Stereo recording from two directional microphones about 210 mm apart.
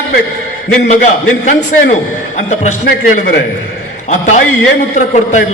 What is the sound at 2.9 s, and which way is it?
Speech, 45° left (ahead or behind).